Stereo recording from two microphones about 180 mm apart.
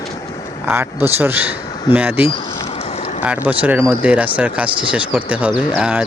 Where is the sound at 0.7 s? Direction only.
10° right (ahead or behind).